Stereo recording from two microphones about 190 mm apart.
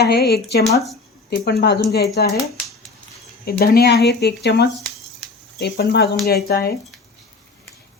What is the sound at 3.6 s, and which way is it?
Speech, 55° left (ahead or behind).